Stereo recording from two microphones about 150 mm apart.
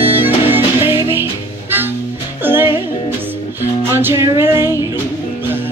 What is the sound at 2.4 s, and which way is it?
Music, 15° right (ahead or behind).